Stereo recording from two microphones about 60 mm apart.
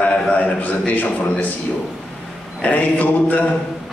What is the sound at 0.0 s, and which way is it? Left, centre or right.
A man's voice, left.